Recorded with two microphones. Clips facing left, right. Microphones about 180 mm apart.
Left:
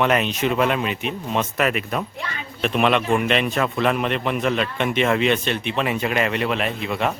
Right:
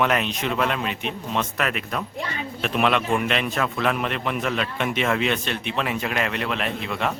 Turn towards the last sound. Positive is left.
turn(degrees=5)  # may be behind; listen again after turning